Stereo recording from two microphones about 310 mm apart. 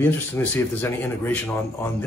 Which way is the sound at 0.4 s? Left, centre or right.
Centre.